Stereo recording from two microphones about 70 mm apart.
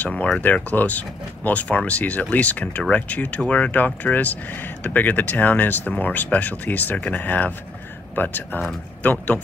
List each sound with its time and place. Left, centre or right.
0.0 s speech: centre